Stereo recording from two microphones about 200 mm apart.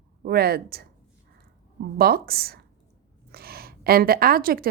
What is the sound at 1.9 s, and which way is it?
Speech, 50° right (ahead or behind).